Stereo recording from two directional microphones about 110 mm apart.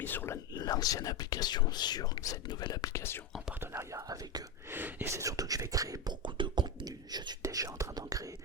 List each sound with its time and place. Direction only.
0.0 s speech: 20° left (ahead or behind)
0.5 s speech: 35° left (ahead or behind)
2.9 s speech: 20° left (ahead or behind)
3.6 s speech: 25° right (ahead or behind)
4.7 s speech: 20° right (ahead or behind)
6.2 s whispering: 45° right (ahead or behind)